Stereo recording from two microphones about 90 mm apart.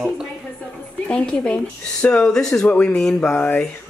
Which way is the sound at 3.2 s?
25° left (ahead or behind).